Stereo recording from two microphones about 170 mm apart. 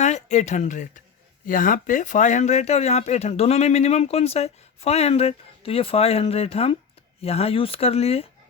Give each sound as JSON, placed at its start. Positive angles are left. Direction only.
{"t": 0.0, "sound": "speech", "side_deg": 45}